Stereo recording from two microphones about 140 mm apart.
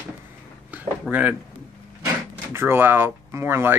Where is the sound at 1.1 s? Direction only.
10° right (ahead or behind).